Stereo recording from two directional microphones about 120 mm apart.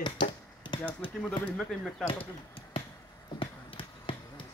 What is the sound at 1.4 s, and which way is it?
Speech, 5° left (ahead or behind).